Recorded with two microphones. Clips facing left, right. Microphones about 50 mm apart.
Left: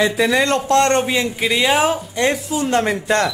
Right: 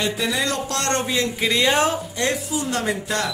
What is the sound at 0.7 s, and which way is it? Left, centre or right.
Speech, left.